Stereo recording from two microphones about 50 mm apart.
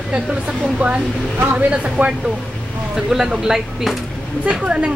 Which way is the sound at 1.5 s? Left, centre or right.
Right.